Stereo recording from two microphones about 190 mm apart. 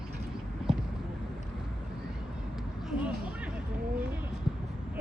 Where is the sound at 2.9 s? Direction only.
5° right (ahead or behind).